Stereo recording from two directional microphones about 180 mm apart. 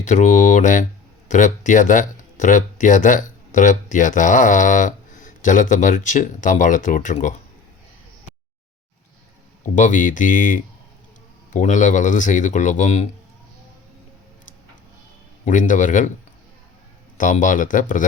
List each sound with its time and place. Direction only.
0.0 s speech: 45° left (ahead or behind)
9.6 s speech: 45° left (ahead or behind)
15.4 s speech: 45° left (ahead or behind)
17.2 s speech: 45° left (ahead or behind)